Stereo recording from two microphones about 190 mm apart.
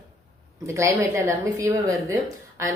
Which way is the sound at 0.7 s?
15° right (ahead or behind).